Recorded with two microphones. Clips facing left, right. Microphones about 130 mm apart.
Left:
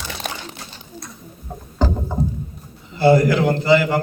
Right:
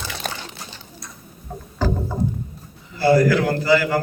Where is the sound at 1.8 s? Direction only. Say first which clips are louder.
Left 1 dB; 20° left (ahead or behind).